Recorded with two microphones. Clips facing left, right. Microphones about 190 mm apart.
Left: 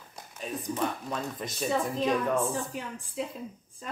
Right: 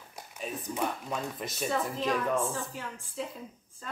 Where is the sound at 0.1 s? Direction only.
5° right (ahead or behind).